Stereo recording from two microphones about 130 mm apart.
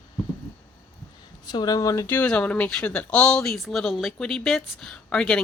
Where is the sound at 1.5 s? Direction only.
30° left (ahead or behind).